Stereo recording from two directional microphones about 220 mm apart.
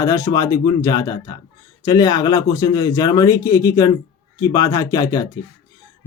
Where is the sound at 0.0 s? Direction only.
15° left (ahead or behind).